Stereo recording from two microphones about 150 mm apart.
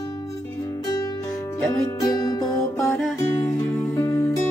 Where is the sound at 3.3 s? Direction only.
15° left (ahead or behind).